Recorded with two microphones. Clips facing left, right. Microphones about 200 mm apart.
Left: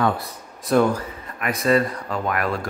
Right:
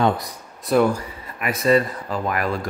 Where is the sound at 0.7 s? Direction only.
5° right (ahead or behind).